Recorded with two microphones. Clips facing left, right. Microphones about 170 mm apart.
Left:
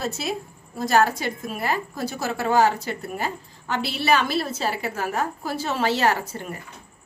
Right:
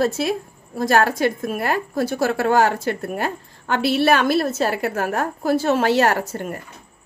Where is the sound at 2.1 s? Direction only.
80° right.